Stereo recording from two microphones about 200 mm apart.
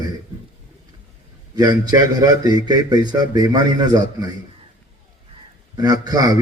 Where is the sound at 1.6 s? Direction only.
20° right (ahead or behind).